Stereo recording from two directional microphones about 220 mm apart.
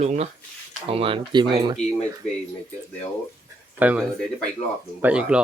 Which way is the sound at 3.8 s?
5° right (ahead or behind).